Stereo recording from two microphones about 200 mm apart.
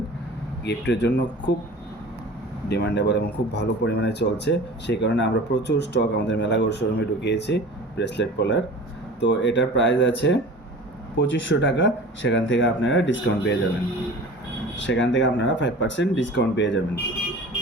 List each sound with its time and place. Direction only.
0.6 s speech: 60° left (ahead or behind)
2.6 s speech: 60° left (ahead or behind)
14.8 s speech: 65° left (ahead or behind)